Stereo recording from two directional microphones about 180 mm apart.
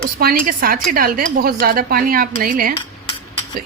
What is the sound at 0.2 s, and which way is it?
A woman's voice, 55° right (ahead or behind).